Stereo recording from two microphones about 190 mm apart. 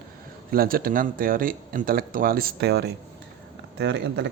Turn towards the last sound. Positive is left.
turn(degrees=-65)  # may be behind; listen again after turning